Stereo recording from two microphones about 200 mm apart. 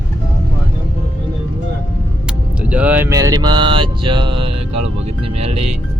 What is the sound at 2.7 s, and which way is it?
Mantra, 5° right (ahead or behind).